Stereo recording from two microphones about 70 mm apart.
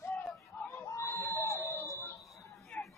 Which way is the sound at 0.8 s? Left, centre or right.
Left.